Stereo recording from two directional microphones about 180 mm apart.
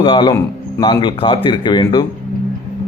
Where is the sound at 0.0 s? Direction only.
25° left (ahead or behind).